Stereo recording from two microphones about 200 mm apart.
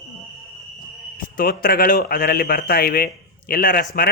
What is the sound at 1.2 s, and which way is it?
A man's voice, 45° left (ahead or behind).